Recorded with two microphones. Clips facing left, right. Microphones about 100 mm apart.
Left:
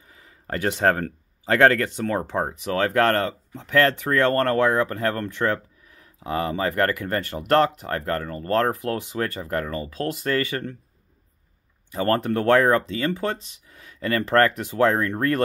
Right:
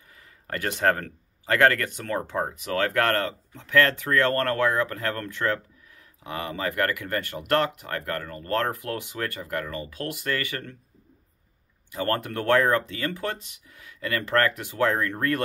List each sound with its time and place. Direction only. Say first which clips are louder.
0.1 s speech: left 3 dB; 20° left (ahead or behind)
11.9 s speech: left 5 dB; 30° left (ahead or behind)